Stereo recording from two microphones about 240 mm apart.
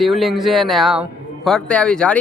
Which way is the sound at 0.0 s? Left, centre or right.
Centre.